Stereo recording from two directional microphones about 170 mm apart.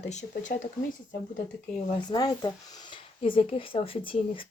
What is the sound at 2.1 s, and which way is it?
Speech, 25° left (ahead or behind).